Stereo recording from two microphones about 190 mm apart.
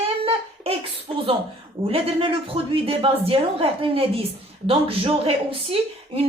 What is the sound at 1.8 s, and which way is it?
A woman's voice, 30° right (ahead or behind).